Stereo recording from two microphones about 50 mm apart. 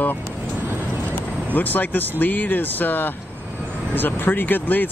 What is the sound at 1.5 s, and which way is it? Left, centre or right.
Speech, left.